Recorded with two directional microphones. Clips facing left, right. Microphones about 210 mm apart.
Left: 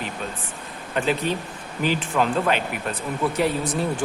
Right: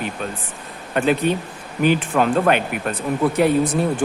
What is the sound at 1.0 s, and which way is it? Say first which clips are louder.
Speech: right 5 dB; 55° right (ahead or behind).